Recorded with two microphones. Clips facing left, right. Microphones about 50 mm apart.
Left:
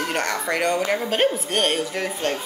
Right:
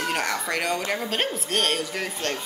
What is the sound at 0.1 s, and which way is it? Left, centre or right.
A woman's voice, centre.